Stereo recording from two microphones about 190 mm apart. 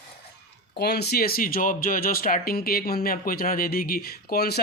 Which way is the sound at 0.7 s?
60° left (ahead or behind).